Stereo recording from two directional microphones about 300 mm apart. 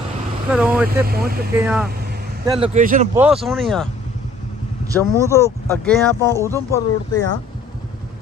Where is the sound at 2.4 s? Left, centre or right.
Centre.